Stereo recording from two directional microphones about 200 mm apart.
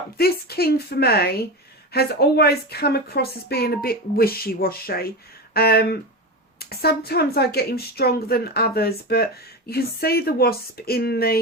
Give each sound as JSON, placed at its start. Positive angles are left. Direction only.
{"t": 0.2, "sound": "speech", "side_deg": 50}